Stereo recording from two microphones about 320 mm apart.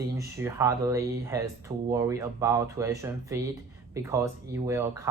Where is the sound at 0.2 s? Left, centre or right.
Centre.